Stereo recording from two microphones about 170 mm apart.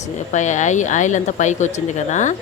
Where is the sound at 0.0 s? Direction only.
45° left (ahead or behind).